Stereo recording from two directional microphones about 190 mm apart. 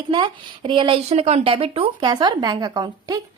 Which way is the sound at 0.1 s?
25° right (ahead or behind).